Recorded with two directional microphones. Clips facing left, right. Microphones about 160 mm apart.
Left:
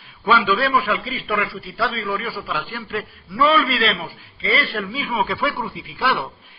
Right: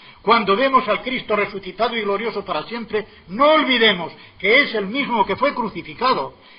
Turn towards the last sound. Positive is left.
turn(degrees=-30)  # may be behind; listen again after turning